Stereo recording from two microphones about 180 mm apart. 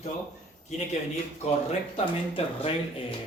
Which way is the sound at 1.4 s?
35° left (ahead or behind).